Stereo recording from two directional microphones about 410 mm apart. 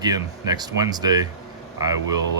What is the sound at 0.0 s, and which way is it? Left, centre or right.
Speech, centre.